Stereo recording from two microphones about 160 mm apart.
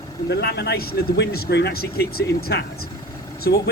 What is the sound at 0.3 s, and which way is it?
Speech, 90° left.